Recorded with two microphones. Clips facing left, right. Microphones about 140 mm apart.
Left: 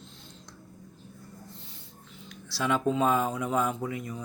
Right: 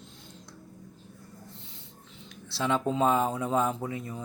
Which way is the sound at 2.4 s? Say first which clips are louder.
Left 1 dB; 25° right (ahead or behind).